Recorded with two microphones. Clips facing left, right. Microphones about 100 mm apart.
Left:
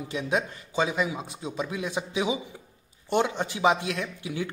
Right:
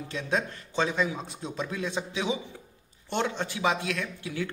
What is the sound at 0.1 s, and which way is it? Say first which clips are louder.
Speech: left 2 dB; 10° left (ahead or behind).